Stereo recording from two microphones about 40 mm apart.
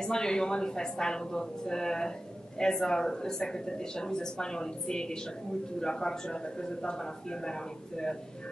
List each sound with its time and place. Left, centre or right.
0.0 s speech: centre